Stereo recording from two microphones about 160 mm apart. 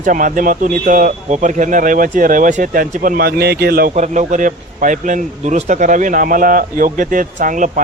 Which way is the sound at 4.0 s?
50° right (ahead or behind).